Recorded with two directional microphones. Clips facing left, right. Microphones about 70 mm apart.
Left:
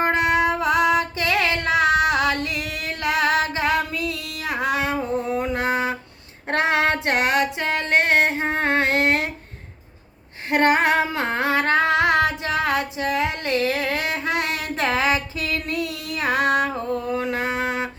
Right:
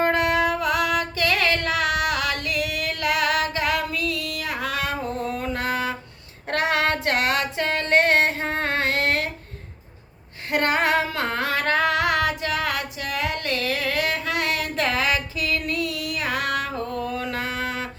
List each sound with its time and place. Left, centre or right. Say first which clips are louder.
0.0 s music: left 1 dB; centre
5.4 s mantra: left 3 dB; left
6.5 s female singing: left 2 dB; left
10.5 s female singing: left 3 dB; left
17.2 s chant: left 4 dB; left